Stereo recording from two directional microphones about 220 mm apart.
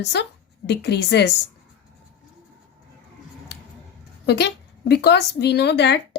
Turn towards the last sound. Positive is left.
turn(degrees=50)  # may be behind; listen again after turning